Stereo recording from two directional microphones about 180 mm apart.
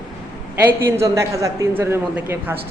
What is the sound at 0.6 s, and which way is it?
A man's voice, 15° right (ahead or behind).